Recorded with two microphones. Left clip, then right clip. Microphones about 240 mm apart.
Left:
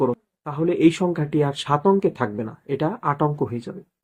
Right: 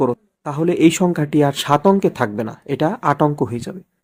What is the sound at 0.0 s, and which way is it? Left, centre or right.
Speech, right.